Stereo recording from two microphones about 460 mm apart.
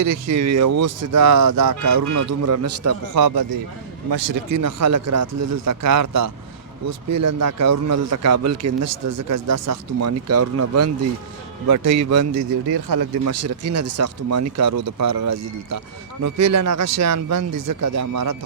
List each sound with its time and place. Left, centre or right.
0.0 s a man's voice: right
12.6 s a man's voice: right